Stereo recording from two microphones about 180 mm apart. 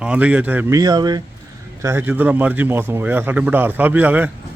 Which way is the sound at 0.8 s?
20° right (ahead or behind).